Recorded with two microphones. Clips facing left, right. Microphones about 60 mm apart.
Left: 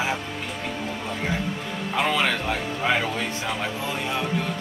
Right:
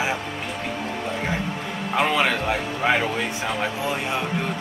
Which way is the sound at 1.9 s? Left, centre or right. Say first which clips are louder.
Right 2 dB; centre.